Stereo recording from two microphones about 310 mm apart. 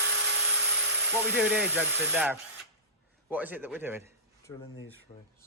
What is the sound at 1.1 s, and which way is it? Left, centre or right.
Speech, centre.